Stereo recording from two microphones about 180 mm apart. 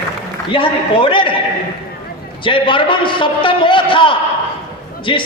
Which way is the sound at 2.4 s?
30° left (ahead or behind).